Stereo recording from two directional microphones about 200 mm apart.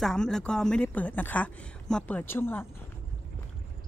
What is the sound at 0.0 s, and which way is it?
A woman's voice, 5° left (ahead or behind).